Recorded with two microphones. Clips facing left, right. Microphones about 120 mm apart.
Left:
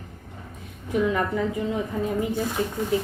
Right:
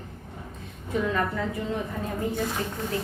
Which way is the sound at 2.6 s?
15° left (ahead or behind).